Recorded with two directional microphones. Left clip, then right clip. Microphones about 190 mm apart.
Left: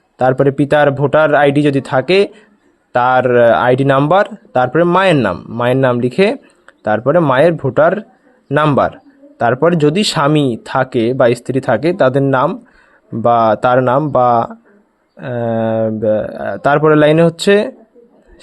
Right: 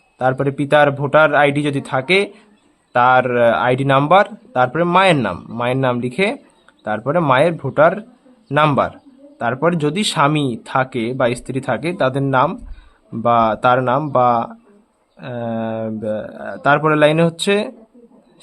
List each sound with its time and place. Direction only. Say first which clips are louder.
0.2 s speech: left 6 dB; 30° left (ahead or behind)